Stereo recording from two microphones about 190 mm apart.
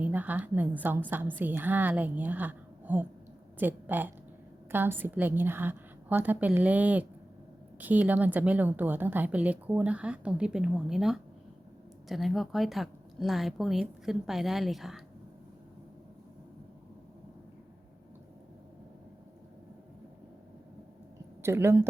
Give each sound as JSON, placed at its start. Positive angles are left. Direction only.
{"t": 0.0, "sound": "a woman's voice", "side_deg": -10}
{"t": 21.4, "sound": "a woman's voice", "side_deg": -15}